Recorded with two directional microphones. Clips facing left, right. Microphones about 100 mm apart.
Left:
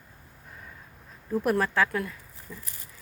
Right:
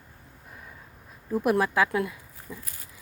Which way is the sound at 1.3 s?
10° right (ahead or behind).